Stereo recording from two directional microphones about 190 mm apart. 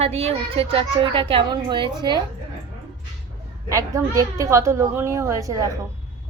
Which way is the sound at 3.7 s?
15° right (ahead or behind).